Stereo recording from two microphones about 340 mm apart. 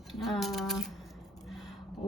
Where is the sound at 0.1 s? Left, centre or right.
Centre.